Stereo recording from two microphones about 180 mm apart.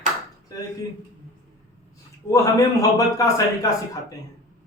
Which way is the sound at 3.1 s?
20° left (ahead or behind).